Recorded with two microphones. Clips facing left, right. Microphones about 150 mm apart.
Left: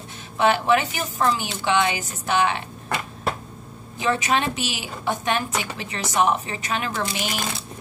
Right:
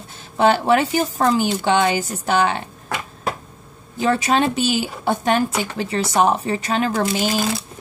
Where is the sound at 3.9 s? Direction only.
35° right (ahead or behind).